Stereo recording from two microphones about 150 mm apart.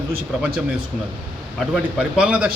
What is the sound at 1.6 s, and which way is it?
Speech, 5° right (ahead or behind).